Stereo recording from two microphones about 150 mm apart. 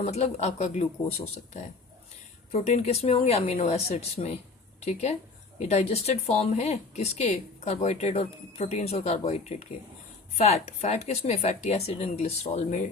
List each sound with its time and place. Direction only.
0.0 s speech: 45° left (ahead or behind)
2.5 s speech: 45° left (ahead or behind)